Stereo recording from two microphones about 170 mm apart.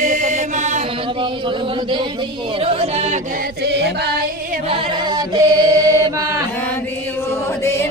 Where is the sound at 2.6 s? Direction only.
35° right (ahead or behind).